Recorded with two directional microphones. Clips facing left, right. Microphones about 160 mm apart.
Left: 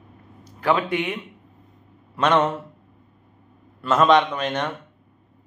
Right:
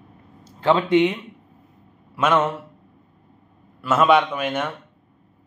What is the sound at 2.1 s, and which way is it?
Speech, 5° right (ahead or behind).